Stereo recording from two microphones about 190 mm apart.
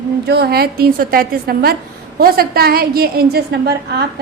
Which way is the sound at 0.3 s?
55° right (ahead or behind).